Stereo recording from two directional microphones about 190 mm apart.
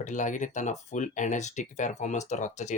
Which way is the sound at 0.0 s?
40° left (ahead or behind).